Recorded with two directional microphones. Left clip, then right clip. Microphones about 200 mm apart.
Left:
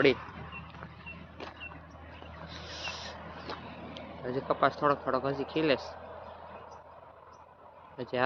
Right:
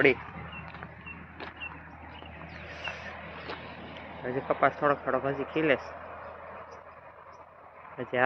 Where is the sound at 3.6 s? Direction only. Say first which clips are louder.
Right 2 dB; 55° left (ahead or behind).